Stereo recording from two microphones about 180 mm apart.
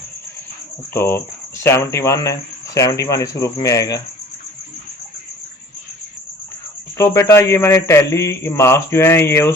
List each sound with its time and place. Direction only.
0.9 s a man's voice: 15° left (ahead or behind)
6.9 s a man's voice: 15° left (ahead or behind)